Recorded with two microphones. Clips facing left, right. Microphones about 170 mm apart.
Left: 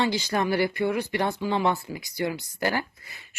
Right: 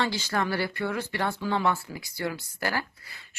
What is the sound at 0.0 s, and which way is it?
Speech, 15° left (ahead or behind).